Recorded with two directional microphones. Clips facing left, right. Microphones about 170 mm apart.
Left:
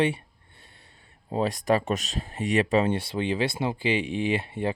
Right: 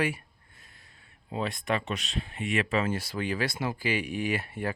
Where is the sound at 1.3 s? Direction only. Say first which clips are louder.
Left 6 dB; 35° left (ahead or behind).